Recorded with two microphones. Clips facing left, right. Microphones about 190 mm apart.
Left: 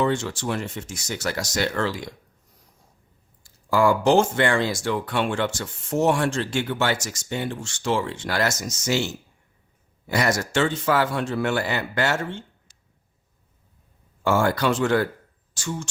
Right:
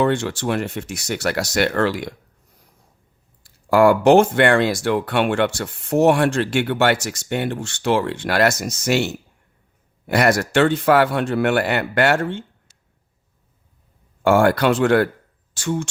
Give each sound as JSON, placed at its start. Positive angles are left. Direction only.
{"t": 0.0, "sound": "speech", "side_deg": -60}
{"t": 3.4, "sound": "speech", "side_deg": -60}
{"t": 14.3, "sound": "speech", "side_deg": -60}